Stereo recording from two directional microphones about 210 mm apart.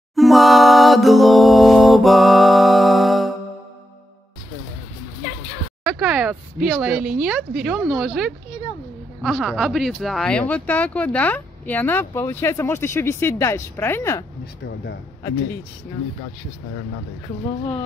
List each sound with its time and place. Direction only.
0.1 s a capella: centre (ahead or behind)
5.9 s speech: centre (ahead or behind)
14.4 s speech: 55° left (ahead or behind)